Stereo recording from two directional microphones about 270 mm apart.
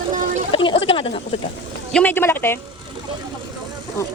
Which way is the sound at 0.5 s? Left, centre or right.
Centre.